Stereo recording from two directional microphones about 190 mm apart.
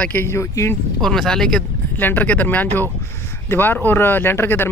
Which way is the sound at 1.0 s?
5° left (ahead or behind).